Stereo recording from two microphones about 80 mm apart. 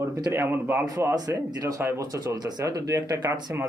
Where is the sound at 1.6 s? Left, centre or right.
Right.